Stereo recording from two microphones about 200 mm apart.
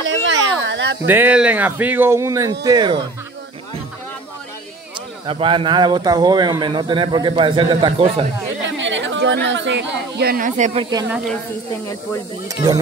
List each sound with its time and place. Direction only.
0.3 s a sound: 65° right (ahead or behind)
1.0 s speech: 10° right (ahead or behind)
5.2 s speech: 25° right (ahead or behind)
8.6 s speech: 65° right (ahead or behind); by 10.7 s 45° right (ahead or behind)
10.7 s speech: 25° right (ahead or behind)